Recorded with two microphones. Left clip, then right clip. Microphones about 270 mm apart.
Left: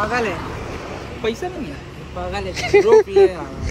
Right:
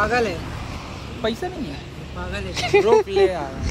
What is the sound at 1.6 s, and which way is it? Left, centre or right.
Speech, centre.